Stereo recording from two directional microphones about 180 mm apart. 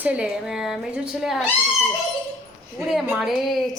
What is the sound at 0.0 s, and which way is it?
A woman's voice, 5° right (ahead or behind).